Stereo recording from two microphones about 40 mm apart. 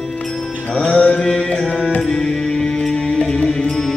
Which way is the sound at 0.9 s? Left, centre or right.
Left.